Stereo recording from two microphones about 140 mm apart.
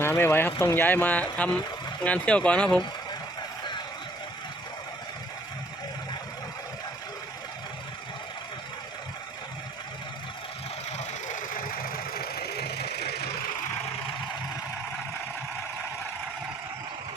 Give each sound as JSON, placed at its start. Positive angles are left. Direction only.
{"t": 0.0, "sound": "speech", "side_deg": 15}
{"t": 11.3, "sound": "engine", "side_deg": 90}